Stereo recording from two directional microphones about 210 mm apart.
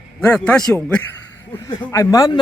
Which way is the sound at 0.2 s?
5° left (ahead or behind).